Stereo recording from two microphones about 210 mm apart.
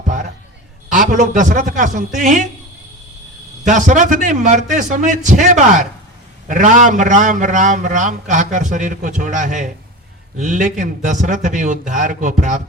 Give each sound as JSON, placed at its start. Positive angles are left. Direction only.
{"t": 0.9, "sound": "a man's voice", "side_deg": -40}
{"t": 3.7, "sound": "a man's voice", "side_deg": -40}